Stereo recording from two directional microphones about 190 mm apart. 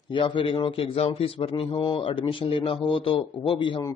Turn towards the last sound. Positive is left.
turn(degrees=25)  # may be behind; listen again after turning